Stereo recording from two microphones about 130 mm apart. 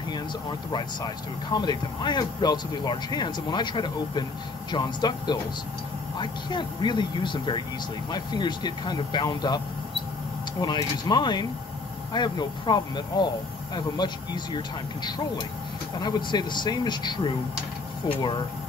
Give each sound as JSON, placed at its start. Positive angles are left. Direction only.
{"t": 0.7, "sound": "speech", "side_deg": 30}
{"t": 10.6, "sound": "speech", "side_deg": 35}